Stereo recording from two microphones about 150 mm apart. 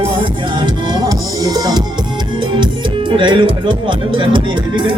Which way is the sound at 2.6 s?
30° right (ahead or behind).